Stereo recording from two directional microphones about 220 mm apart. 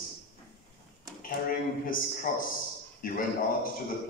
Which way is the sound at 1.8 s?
40° left (ahead or behind).